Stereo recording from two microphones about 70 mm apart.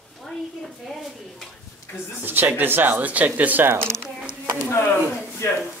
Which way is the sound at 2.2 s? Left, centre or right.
Right.